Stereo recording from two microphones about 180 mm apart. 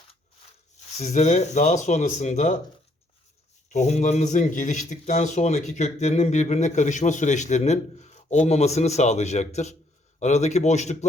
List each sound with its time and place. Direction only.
0.9 s speech: 40° left (ahead or behind)
3.7 s speech: 40° left (ahead or behind)